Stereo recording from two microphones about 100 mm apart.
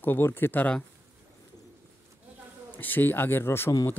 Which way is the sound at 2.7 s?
20° left (ahead or behind).